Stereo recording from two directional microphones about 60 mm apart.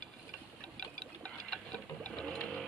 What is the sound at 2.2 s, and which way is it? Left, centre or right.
Sewing machine, centre.